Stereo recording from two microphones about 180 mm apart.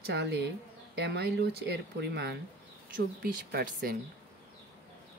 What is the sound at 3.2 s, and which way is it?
Speech, 55° right (ahead or behind).